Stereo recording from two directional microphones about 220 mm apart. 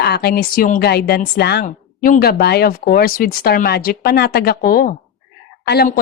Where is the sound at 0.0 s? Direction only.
45° left (ahead or behind).